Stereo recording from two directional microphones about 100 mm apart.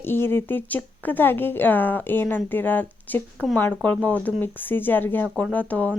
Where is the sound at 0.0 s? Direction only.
20° left (ahead or behind).